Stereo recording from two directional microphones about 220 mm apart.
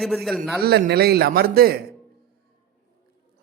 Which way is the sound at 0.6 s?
45° right (ahead or behind).